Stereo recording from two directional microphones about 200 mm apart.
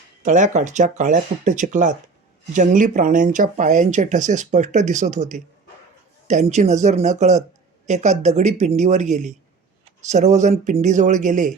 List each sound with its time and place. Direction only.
0.2 s speech: 35° right (ahead or behind)